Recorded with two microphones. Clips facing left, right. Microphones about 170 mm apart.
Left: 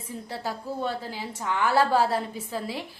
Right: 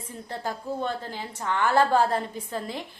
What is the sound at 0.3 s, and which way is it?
A woman's voice, 5° left (ahead or behind).